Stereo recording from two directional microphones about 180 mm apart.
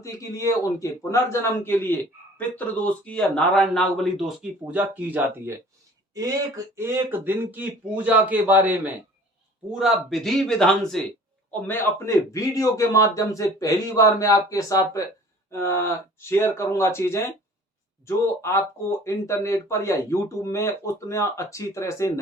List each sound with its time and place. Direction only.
0.0 s speech: 20° left (ahead or behind); by 5.6 s 10° right (ahead or behind)
6.7 s a man's voice: 15° right (ahead or behind); by 22.2 s 15° left (ahead or behind)